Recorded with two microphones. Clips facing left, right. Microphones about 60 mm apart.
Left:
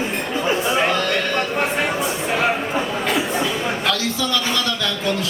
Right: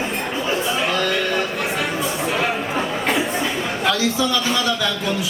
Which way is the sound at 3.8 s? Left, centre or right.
Centre.